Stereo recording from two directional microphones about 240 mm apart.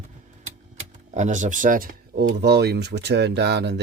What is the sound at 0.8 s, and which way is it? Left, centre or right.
Speech, right.